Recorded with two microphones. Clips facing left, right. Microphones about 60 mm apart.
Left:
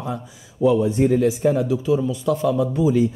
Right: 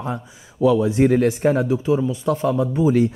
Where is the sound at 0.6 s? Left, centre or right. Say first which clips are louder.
Right 1 dB; right.